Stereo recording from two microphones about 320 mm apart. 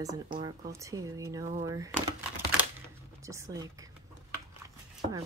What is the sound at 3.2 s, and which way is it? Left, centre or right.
Speech, centre.